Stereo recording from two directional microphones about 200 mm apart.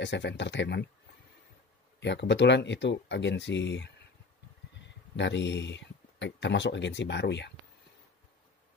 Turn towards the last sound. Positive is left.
turn(degrees=60)  # may be behind; listen again after turning